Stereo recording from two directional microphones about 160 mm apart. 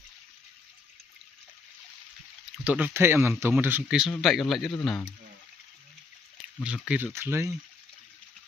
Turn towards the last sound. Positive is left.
turn(degrees=-15)  # may be behind; listen again after turning